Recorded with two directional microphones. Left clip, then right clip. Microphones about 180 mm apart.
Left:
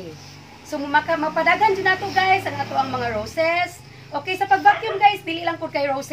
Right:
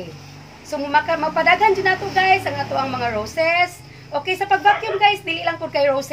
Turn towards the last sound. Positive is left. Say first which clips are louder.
# right 5 dB
turn(degrees=-20)  # may be behind; listen again after turning